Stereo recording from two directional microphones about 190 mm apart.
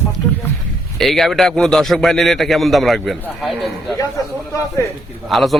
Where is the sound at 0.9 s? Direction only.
Centre (ahead or behind).